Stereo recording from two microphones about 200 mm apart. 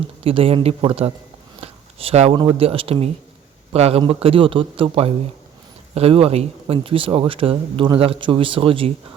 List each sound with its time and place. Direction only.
0.3 s speech: 30° right (ahead or behind)